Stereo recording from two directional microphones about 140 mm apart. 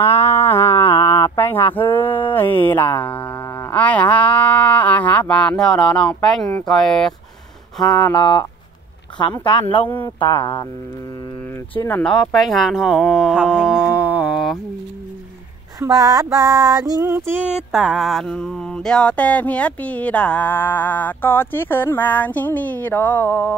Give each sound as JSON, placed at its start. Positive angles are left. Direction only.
{"t": 0.0, "sound": "a sound", "side_deg": 20}
{"t": 1.8, "sound": "female singing", "side_deg": 15}
{"t": 2.3, "sound": "speech", "side_deg": 15}
{"t": 8.2, "sound": "speech", "side_deg": 35}
{"t": 12.0, "sound": "speech", "side_deg": 5}
{"t": 13.8, "sound": "a sound", "side_deg": -10}
{"t": 15.8, "sound": "female singing", "side_deg": -25}